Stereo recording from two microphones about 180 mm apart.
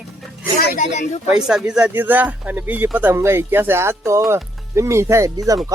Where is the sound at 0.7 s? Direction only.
45° left (ahead or behind).